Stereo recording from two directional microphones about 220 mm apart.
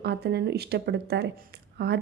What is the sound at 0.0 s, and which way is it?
A woman's voice, 50° right (ahead or behind).